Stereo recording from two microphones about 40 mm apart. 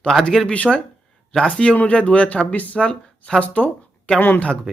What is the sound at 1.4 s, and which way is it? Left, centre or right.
Speech, left.